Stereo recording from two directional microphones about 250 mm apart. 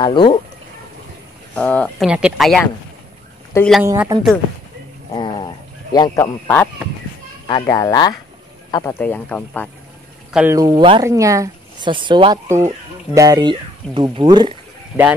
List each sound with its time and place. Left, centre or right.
0.0 s speech: centre
1.5 s speech: centre
3.8 s speech: centre
5.1 s a sound: centre
5.9 s speech: centre
10.3 s speech: centre